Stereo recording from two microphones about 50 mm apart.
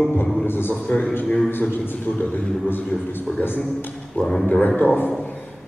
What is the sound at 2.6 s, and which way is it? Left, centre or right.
A man's voice, left.